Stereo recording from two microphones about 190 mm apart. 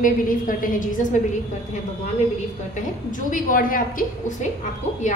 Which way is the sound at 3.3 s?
45° left (ahead or behind).